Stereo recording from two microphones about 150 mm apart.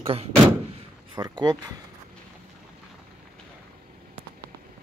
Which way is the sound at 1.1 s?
30° right (ahead or behind).